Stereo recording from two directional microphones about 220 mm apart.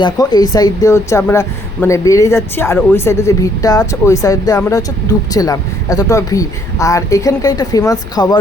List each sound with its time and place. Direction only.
0.0 s speech: 15° left (ahead or behind)